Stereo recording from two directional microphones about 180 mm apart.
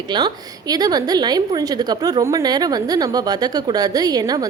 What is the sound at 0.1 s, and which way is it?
A woman's voice, 25° right (ahead or behind).